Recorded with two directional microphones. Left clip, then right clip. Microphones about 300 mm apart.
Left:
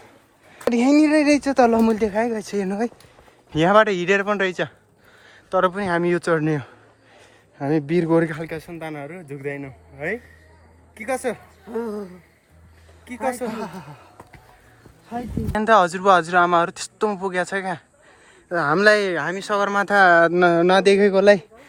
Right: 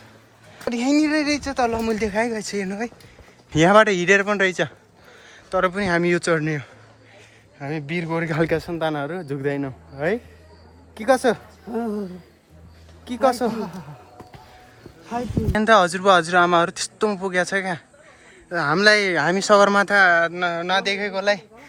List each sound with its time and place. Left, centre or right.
0.5 s speech: centre
8.4 s a man's voice: right
13.1 s a man's voice: centre
13.5 s a man's voice: left
15.5 s speech: centre